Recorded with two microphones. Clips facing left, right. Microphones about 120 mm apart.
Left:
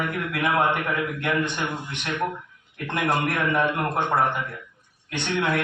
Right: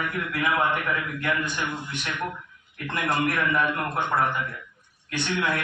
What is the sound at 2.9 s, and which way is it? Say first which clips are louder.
A man's voice: left 1 dB; 30° left (ahead or behind).